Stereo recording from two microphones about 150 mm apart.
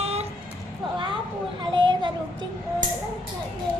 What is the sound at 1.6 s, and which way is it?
Child singing, 30° right (ahead or behind).